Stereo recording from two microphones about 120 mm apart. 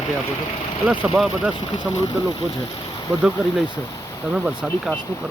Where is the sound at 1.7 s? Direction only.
40° left (ahead or behind).